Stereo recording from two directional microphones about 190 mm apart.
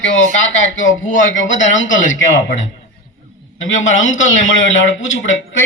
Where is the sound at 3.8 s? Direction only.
90° left.